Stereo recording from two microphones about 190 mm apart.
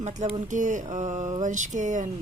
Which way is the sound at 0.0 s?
40° right (ahead or behind).